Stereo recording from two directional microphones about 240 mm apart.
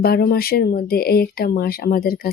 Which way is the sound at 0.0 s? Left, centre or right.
Left.